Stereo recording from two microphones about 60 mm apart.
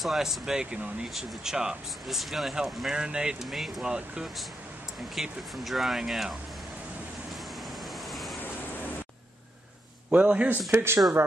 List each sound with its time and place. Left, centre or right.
0.0 s speech: centre
8.1 s waves: centre
10.1 s a man's voice: right
10.7 s speech: right